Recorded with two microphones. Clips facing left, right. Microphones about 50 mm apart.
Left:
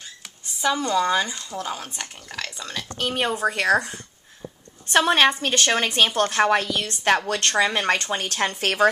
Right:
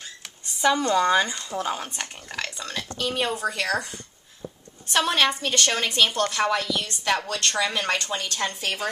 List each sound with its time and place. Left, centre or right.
0.6 s speech: centre
3.0 s speech: left
4.9 s speech: left
8.3 s a woman's voice: left